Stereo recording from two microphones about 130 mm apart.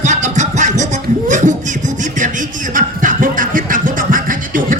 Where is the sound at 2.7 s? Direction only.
90° right.